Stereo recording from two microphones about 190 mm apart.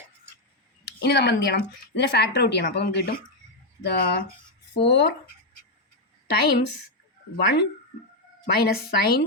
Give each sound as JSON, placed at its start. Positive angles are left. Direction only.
{"t": 1.0, "sound": "speech", "side_deg": 60}
{"t": 4.7, "sound": "speech", "side_deg": 65}
{"t": 6.2, "sound": "a woman's voice", "side_deg": 60}